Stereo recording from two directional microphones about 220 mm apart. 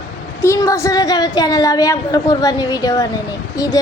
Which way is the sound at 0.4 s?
15° left (ahead or behind).